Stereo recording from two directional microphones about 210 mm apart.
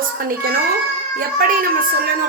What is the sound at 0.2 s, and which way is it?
A woman's voice, 45° right (ahead or behind).